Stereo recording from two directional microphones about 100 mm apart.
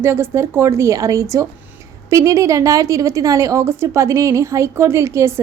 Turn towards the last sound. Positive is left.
turn(degrees=-30)  # may be behind; listen again after turning